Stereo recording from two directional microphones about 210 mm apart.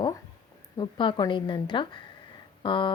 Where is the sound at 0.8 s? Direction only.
25° left (ahead or behind).